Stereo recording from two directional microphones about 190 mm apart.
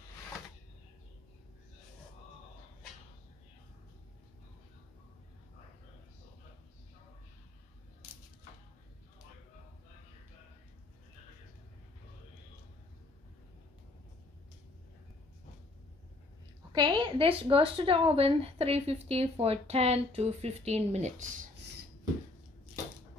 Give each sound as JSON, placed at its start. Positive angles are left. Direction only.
{"t": 16.7, "sound": "speech", "side_deg": -25}